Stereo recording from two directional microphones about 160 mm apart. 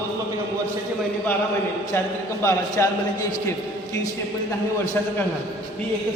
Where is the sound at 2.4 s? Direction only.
15° left (ahead or behind).